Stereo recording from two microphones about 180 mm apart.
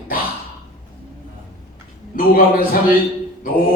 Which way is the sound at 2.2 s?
55° left (ahead or behind).